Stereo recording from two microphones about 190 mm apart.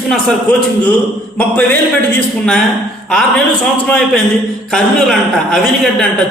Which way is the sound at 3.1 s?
5° left (ahead or behind).